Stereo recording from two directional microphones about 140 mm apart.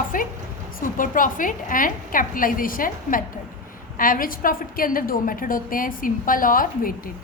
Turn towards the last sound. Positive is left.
turn(degrees=80)